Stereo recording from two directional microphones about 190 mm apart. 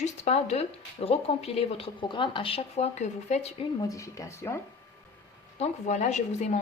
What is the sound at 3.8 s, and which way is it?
Speech, 15° left (ahead or behind).